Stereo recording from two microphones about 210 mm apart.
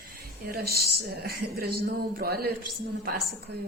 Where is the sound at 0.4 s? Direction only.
45° right (ahead or behind).